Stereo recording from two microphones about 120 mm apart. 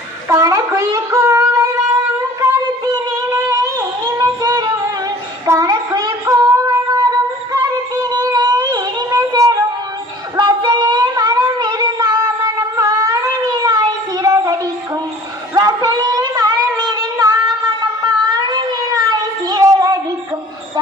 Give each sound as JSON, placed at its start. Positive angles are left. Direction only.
{"t": 0.3, "sound": "child singing", "side_deg": -25}
{"t": 2.4, "sound": "singing", "side_deg": -35}
{"t": 3.2, "sound": "music", "side_deg": -25}
{"t": 6.2, "sound": "a sound", "side_deg": -25}
{"t": 7.5, "sound": "music", "side_deg": -30}
{"t": 10.3, "sound": "child singing", "side_deg": -35}
{"t": 15.5, "sound": "a sound", "side_deg": -30}